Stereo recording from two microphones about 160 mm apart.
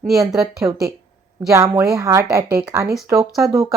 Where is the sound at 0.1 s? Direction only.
20° right (ahead or behind).